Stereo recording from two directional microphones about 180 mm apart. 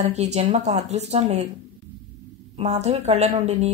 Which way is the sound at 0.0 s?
35° right (ahead or behind).